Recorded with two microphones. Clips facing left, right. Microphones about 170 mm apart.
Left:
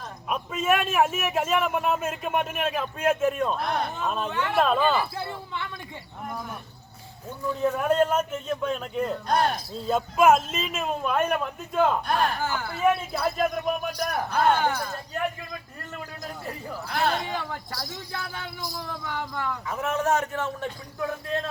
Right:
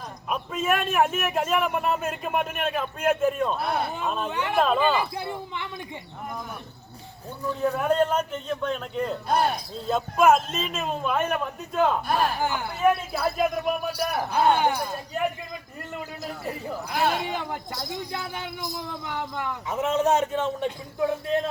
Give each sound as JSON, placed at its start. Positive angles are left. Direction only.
{"t": 0.3, "sound": "a man's voice", "side_deg": 0}
{"t": 4.3, "sound": "a man's voice", "side_deg": -15}
{"t": 4.5, "sound": "a man's voice", "side_deg": 0}
{"t": 4.9, "sound": "a man's voice", "side_deg": -15}
{"t": 7.8, "sound": "a man's voice", "side_deg": 5}
{"t": 12.4, "sound": "a man's voice", "side_deg": -15}
{"t": 12.8, "sound": "a man's voice", "side_deg": -5}
{"t": 16.2, "sound": "a man's voice", "side_deg": -10}
{"t": 17.2, "sound": "speech", "side_deg": -20}